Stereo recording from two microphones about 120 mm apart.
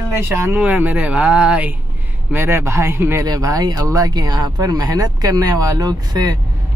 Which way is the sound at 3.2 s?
30° right (ahead or behind).